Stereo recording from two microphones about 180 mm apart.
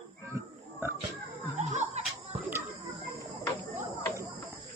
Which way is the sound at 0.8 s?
15° right (ahead or behind).